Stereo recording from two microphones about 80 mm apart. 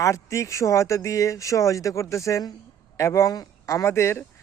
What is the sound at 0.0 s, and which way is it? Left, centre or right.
Speech, left.